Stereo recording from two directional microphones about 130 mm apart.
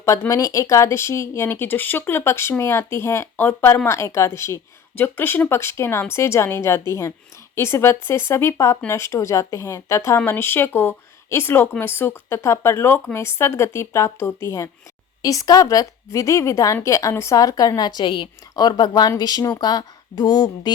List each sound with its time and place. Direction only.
0.0 s a woman's voice: 25° left (ahead or behind)